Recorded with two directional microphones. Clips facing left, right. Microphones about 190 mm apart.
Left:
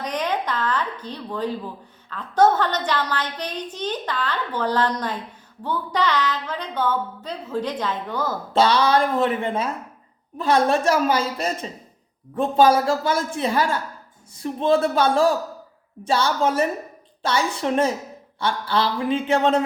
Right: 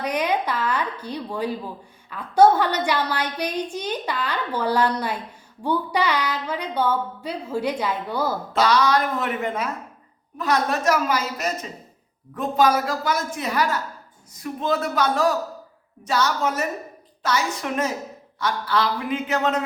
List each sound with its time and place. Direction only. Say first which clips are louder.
0.0 s a woman's voice: right 2 dB; 10° right (ahead or behind)
8.5 s a man's voice: left 2 dB; 30° left (ahead or behind)